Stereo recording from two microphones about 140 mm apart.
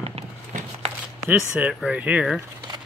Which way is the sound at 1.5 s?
5° right (ahead or behind).